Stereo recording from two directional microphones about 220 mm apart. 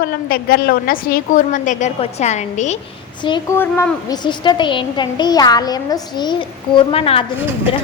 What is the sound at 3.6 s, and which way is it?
A woman's voice, 15° left (ahead or behind).